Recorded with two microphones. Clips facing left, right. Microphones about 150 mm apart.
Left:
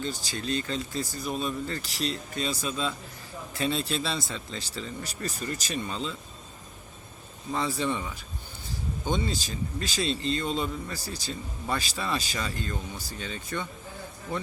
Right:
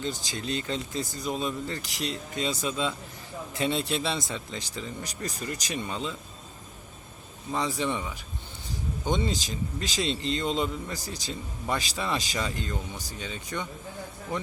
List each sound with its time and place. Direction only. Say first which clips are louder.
0.0 s speech: even; 20° right (ahead or behind)
7.5 s speech: even; 15° right (ahead or behind)